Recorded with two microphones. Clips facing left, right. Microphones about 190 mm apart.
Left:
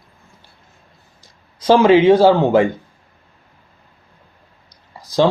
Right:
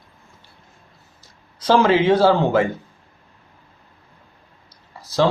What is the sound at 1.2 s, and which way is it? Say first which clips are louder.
Speech: left 5 dB; 15° left (ahead or behind).